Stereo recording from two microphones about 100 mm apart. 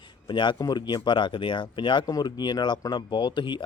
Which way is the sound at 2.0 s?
40° left (ahead or behind).